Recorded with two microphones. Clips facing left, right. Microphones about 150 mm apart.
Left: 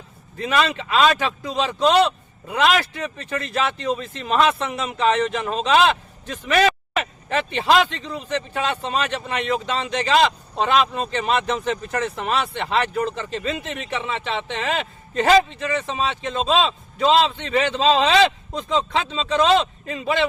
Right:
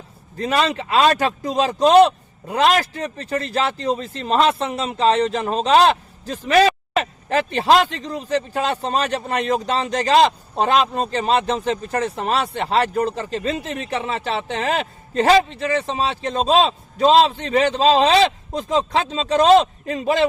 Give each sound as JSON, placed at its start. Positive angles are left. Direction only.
{"t": 0.3, "sound": "speech", "side_deg": -35}